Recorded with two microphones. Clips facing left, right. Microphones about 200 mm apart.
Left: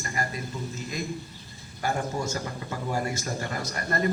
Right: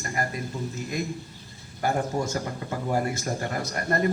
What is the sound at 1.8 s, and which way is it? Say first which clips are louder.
A man's voice: right 3 dB; 55° right (ahead or behind).